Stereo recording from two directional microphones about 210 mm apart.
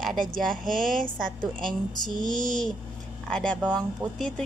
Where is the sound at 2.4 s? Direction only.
5° left (ahead or behind).